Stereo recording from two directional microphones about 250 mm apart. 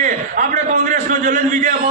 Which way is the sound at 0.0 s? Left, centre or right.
Right.